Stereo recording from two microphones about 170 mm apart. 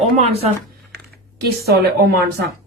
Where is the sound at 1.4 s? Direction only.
70° right (ahead or behind).